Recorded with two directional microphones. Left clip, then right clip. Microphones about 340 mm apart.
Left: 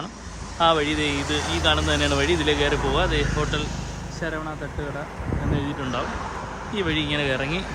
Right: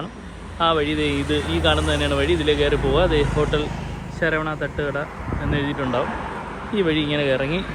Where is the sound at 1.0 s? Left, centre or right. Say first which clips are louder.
Right 2 dB; left.